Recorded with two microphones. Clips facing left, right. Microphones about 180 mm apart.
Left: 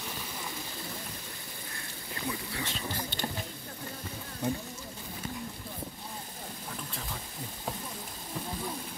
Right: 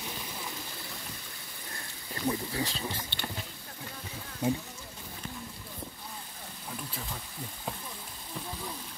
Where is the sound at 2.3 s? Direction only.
35° right (ahead or behind).